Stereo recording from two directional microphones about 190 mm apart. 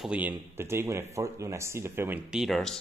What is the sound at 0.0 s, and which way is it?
Speech, 5° right (ahead or behind).